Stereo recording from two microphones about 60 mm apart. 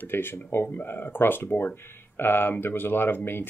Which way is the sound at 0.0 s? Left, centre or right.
Left.